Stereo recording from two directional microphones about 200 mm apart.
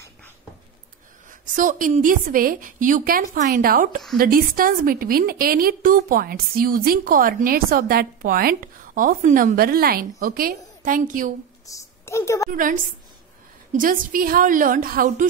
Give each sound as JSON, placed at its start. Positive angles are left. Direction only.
{"t": 1.5, "sound": "a woman's voice", "side_deg": -40}
{"t": 11.6, "sound": "a woman's voice", "side_deg": 15}
{"t": 12.4, "sound": "a woman's voice", "side_deg": -40}